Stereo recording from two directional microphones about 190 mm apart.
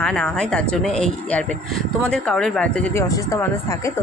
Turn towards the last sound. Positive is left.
turn(degrees=15)  # may be behind; listen again after turning